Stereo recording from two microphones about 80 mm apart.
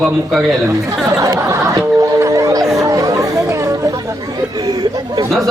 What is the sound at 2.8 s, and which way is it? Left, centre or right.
Chatter, right.